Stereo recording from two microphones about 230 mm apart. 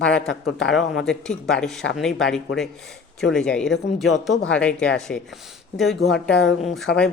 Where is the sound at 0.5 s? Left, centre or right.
Centre.